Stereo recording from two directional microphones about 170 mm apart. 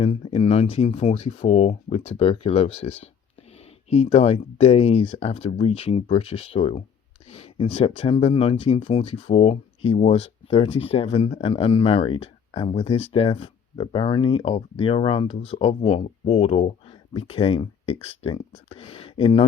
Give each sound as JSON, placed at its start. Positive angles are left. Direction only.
{"t": 0.0, "sound": "speech", "side_deg": 35}